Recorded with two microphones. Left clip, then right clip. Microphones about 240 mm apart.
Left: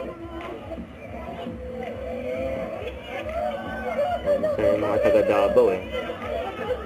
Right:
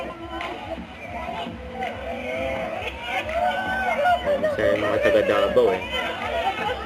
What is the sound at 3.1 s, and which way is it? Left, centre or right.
Speech, centre.